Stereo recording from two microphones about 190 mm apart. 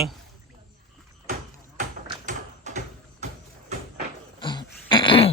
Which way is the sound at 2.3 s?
40° right (ahead or behind).